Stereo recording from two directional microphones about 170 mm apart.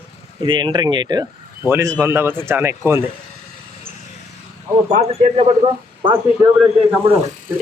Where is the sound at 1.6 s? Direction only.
15° right (ahead or behind).